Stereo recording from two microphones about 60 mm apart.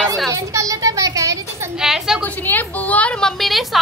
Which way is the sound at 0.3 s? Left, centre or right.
Right.